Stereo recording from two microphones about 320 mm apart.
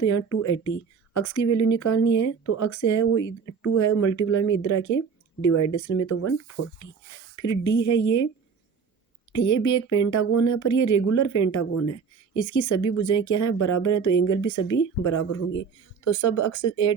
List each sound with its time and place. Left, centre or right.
0.0 s speech: left
9.3 s speech: left